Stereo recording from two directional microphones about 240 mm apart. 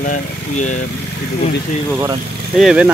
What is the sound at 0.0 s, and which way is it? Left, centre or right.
Speech, left.